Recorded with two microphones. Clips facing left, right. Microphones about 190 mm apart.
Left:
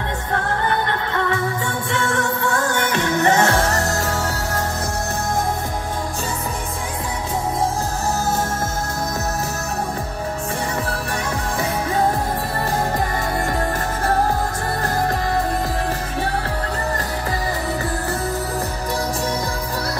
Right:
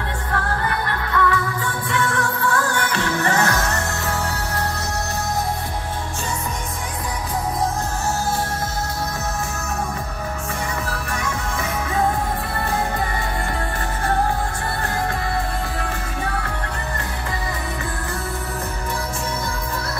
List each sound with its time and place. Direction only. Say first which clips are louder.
1.1 s music: right 3 dB; 25° left (ahead or behind); by 4.6 s 40° left (ahead or behind)
10.9 s music: left 2 dB; 35° left (ahead or behind)